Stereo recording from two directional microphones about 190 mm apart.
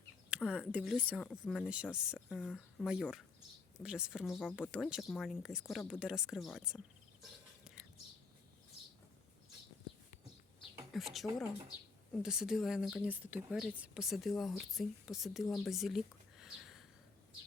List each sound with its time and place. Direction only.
0.3 s speech: 5° right (ahead or behind)
10.9 s speech: centre (ahead or behind)
16.4 s a sound: centre (ahead or behind)